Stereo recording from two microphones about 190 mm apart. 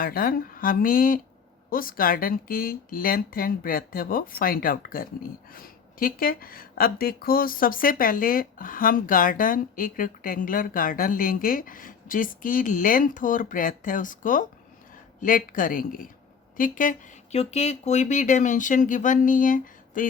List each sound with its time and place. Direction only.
0.0 s speech: 50° left (ahead or behind)